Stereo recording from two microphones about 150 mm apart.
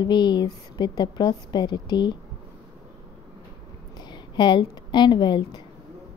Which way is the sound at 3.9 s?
30° left (ahead or behind).